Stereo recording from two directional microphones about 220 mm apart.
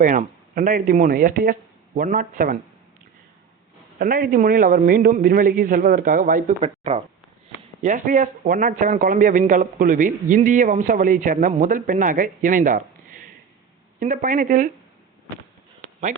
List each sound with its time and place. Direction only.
0.0 s a man's voice: 35° right (ahead or behind)
3.9 s a man's voice: 40° right (ahead or behind)